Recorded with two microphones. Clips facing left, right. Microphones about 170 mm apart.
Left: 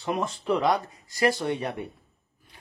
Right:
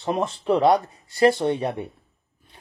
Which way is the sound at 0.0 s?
30° right (ahead or behind).